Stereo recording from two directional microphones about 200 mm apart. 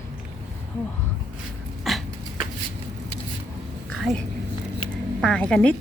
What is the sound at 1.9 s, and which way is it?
Dog, centre (ahead or behind).